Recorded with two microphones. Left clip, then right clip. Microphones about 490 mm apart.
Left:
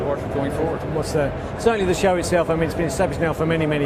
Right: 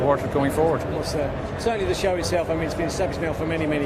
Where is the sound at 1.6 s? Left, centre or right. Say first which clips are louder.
Left 5 dB; left.